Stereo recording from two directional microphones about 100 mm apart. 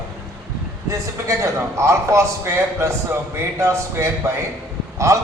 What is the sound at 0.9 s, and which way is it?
A man's voice, 30° right (ahead or behind).